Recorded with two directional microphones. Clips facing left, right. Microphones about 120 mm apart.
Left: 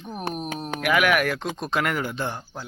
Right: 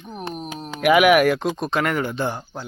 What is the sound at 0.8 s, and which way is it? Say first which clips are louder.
Speech: right 7 dB; 15° right (ahead or behind).